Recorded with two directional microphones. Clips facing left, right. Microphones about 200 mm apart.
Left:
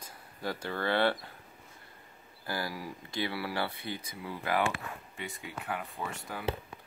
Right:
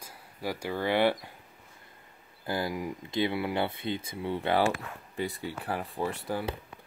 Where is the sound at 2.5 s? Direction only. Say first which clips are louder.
Right 5 dB; 20° right (ahead or behind).